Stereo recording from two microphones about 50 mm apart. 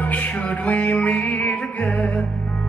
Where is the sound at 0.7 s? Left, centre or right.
Left.